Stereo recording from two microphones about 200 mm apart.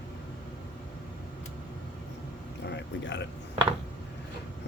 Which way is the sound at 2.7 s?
60° left (ahead or behind).